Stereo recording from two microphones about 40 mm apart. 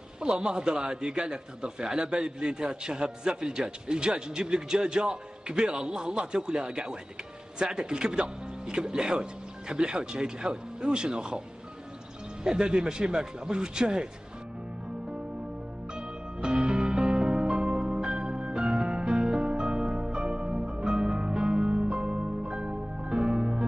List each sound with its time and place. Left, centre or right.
0.2 s a man's voice: right
12.4 s a man's voice: right
15.9 s music: right